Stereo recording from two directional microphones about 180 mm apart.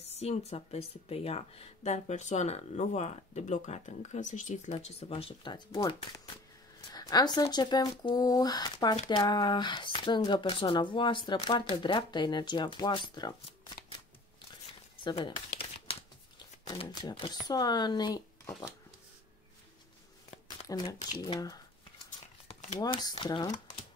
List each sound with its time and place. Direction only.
0.0 s speech: 35° left (ahead or behind)
15.0 s crumpling: 30° left (ahead or behind)
16.6 s speech: 25° left (ahead or behind)
20.2 s a sound: 25° left (ahead or behind)
21.2 s speech: 20° left (ahead or behind)
22.5 s shuffling cards: 40° left (ahead or behind)
22.8 s speech: 20° left (ahead or behind)